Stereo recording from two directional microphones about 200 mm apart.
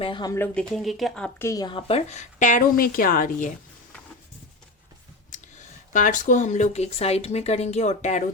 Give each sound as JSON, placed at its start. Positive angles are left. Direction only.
{"t": 0.0, "sound": "a woman's voice", "side_deg": 20}
{"t": 5.9, "sound": "speech", "side_deg": 40}